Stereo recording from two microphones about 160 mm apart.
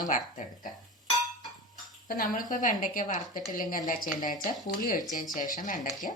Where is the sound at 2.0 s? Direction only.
60° left (ahead or behind).